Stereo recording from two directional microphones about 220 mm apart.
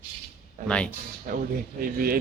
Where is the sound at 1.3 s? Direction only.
35° right (ahead or behind).